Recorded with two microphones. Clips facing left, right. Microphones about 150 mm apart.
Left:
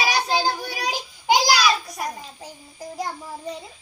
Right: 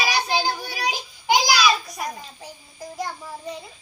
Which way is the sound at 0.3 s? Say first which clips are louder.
Left 1 dB; 20° left (ahead or behind).